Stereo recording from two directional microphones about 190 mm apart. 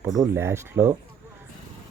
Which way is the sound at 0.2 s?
15° right (ahead or behind).